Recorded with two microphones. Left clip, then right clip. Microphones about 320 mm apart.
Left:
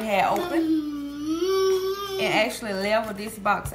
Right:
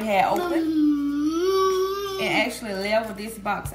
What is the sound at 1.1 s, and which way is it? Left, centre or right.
Baby cry, centre.